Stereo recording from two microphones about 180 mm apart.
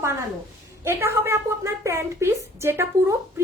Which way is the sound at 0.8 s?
15° right (ahead or behind).